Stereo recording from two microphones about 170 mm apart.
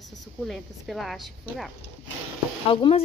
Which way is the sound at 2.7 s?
30° left (ahead or behind).